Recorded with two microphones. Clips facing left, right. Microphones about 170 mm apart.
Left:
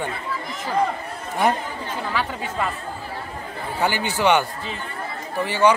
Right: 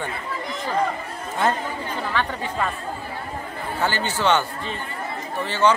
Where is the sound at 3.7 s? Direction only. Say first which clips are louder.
Left 2 dB; 15° left (ahead or behind).